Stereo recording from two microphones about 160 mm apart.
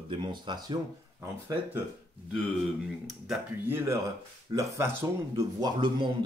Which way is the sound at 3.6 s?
15° right (ahead or behind).